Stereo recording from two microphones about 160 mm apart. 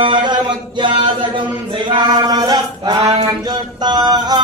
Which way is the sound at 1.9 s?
25° right (ahead or behind).